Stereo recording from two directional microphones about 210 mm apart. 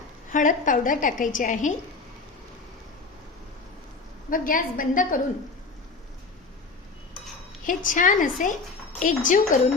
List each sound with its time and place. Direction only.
0.3 s a woman's voice: 40° left (ahead or behind)
4.3 s a woman's voice: 40° left (ahead or behind)
7.6 s a woman's voice: 40° left (ahead or behind)